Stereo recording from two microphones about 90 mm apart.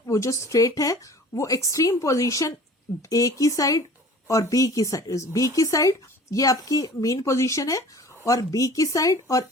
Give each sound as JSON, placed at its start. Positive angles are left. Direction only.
{"t": 0.0, "sound": "speech", "side_deg": 35}